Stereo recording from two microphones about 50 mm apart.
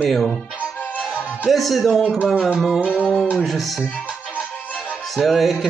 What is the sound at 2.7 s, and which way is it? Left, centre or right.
Music, right.